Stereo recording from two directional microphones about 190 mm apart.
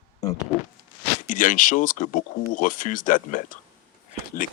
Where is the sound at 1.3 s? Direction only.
45° left (ahead or behind).